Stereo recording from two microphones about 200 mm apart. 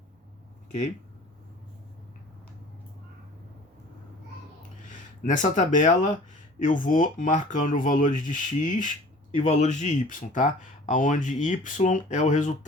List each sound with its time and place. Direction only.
4.9 s speech: 40° left (ahead or behind)